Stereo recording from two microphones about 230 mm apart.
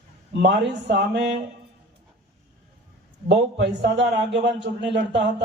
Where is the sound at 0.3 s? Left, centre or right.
Right.